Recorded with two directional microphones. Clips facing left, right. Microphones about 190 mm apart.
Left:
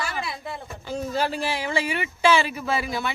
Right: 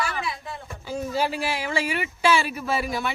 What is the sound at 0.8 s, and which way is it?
Speech, 10° right (ahead or behind).